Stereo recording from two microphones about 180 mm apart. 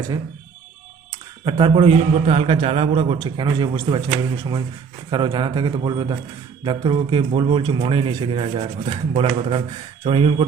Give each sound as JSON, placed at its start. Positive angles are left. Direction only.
{"t": 1.5, "sound": "a man's voice", "side_deg": -30}